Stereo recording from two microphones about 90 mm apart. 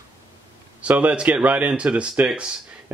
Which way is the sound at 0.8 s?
15° right (ahead or behind).